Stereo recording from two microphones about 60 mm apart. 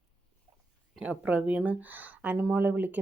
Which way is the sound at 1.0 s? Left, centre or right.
Right.